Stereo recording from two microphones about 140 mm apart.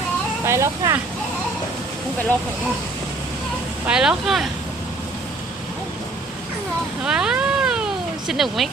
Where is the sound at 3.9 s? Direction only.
5° right (ahead or behind).